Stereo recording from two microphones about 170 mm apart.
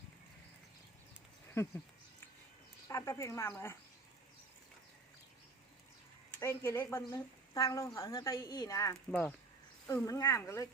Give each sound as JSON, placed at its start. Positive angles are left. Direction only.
{"t": 1.6, "sound": "speech", "side_deg": 15}
{"t": 2.9, "sound": "speech", "side_deg": 15}
{"t": 6.4, "sound": "a woman's voice", "side_deg": 15}